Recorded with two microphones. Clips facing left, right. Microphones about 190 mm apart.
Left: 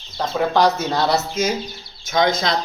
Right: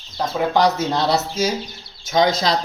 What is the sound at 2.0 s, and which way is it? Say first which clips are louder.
Speech: right 1 dB; 35° right (ahead or behind).